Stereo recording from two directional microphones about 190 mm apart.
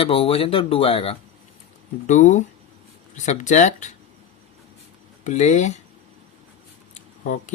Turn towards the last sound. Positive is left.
turn(degrees=40)  # may be behind; listen again after turning